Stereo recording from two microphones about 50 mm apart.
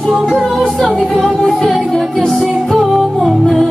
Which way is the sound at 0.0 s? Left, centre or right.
Centre.